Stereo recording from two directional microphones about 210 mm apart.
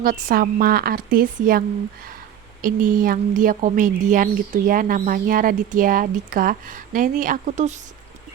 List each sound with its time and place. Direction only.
0.0 s a woman's voice: 45° right (ahead or behind)